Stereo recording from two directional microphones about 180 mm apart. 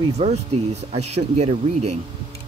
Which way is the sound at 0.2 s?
35° right (ahead or behind).